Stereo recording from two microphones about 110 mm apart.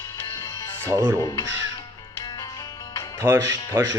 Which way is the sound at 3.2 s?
20° right (ahead or behind).